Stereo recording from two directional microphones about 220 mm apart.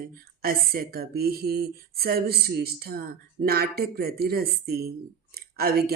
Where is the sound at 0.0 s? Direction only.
40° right (ahead or behind).